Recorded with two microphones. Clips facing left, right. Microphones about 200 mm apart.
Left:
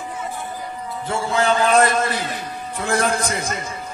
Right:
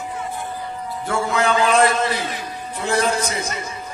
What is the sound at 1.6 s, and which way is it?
A man's voice, 45° left (ahead or behind).